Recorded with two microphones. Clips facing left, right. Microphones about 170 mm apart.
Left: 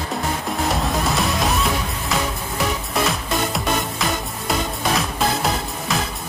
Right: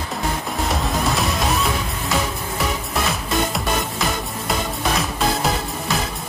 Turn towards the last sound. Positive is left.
turn(degrees=0)  # may be behind; listen again after turning